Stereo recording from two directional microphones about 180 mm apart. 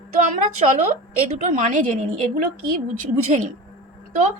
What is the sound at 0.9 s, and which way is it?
A woman's voice, 40° right (ahead or behind).